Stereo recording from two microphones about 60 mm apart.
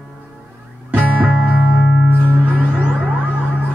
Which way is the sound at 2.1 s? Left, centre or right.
Right.